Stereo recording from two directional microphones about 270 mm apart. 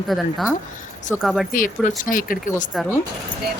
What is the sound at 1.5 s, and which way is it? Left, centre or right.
Speech, left.